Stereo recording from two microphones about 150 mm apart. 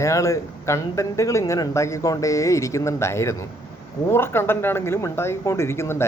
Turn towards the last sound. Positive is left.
turn(degrees=15)  # may be behind; listen again after turning